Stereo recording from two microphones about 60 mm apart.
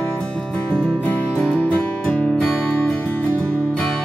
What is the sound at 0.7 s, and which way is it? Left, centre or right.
Music, centre.